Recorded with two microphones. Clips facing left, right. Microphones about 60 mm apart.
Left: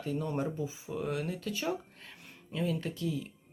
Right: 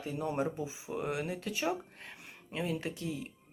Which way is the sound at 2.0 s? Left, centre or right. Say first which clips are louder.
Right 1 dB; right.